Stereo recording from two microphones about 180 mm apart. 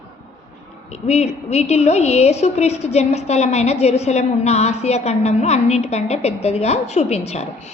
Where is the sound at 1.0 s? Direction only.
35° left (ahead or behind).